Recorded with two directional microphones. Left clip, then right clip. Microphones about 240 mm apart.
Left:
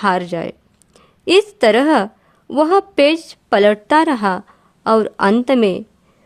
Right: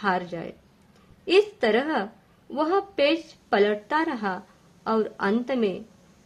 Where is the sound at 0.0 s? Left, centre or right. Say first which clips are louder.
Left 9 dB; left.